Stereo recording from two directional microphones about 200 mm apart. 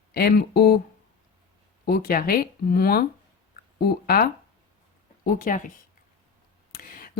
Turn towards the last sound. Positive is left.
turn(degrees=45)  # may be behind; listen again after turning